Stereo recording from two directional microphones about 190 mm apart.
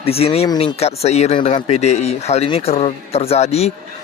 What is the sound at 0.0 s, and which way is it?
Speech, 30° left (ahead or behind).